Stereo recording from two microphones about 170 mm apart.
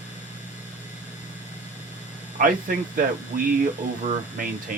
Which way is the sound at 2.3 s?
55° right (ahead or behind).